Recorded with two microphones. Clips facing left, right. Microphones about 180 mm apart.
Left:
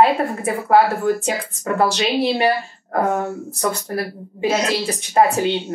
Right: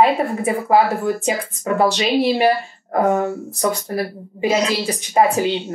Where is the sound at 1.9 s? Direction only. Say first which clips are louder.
Right 2 dB; 5° right (ahead or behind).